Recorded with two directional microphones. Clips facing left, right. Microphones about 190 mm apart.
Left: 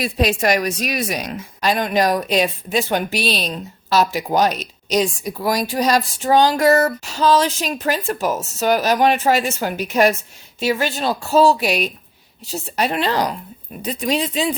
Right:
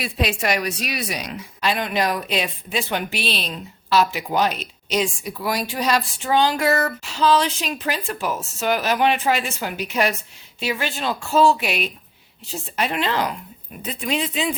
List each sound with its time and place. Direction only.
0.0 s speech: 40° left (ahead or behind)